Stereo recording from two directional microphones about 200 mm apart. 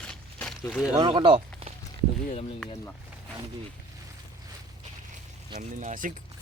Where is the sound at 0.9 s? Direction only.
25° right (ahead or behind).